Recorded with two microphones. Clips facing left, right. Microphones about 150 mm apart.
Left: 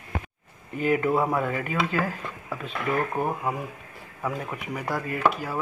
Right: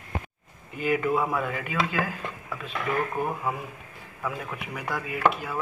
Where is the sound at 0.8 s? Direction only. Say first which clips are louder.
Left 2 dB; centre (ahead or behind).